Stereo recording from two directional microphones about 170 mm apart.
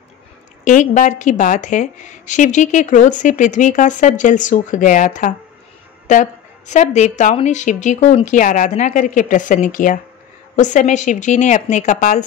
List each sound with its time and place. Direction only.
0.7 s a woman's voice: 45° left (ahead or behind)
6.7 s a woman's voice: 45° left (ahead or behind)